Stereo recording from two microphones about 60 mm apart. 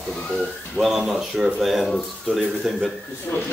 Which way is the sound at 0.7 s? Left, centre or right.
Centre.